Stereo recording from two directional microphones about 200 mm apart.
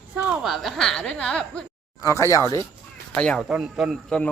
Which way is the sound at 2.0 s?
15° left (ahead or behind).